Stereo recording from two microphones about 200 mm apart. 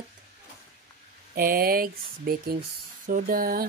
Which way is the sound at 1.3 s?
50° right (ahead or behind).